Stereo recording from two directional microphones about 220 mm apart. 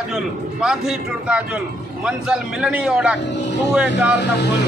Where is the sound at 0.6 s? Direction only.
5° right (ahead or behind).